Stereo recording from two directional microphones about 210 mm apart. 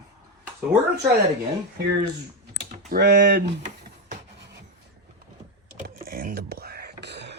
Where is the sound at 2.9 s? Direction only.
50° right (ahead or behind).